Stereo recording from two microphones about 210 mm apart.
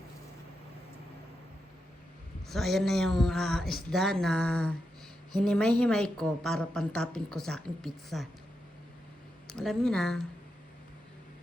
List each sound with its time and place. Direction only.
2.5 s a woman's voice: centre (ahead or behind)
9.5 s a woman's voice: 5° left (ahead or behind)